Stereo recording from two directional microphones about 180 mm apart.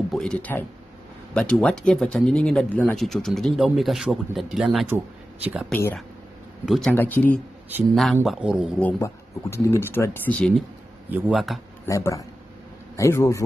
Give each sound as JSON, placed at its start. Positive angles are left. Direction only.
{"t": 0.1, "sound": "speech", "side_deg": 5}
{"t": 5.7, "sound": "speech", "side_deg": 10}
{"t": 6.6, "sound": "speech", "side_deg": 0}
{"t": 8.7, "sound": "speech", "side_deg": 10}
{"t": 11.1, "sound": "speech", "side_deg": -5}
{"t": 11.8, "sound": "speech", "side_deg": 15}